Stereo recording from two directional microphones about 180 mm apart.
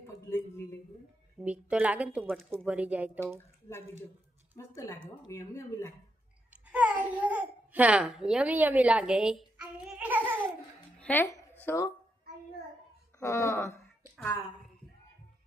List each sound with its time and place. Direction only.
0.3 s a sound: 15° left (ahead or behind)
1.5 s a child's voice: 5° right (ahead or behind)
4.5 s speech: 15° left (ahead or behind)
6.5 s a child's voice: 5° right (ahead or behind)
11.0 s speech: 10° left (ahead or behind)
13.1 s speech: 15° left (ahead or behind)